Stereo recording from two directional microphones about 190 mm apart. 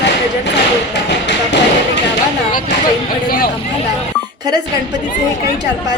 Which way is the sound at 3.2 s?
50° left (ahead or behind).